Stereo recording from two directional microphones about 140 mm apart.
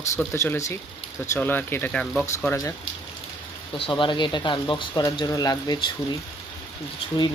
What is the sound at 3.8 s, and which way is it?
Speech, 35° left (ahead or behind).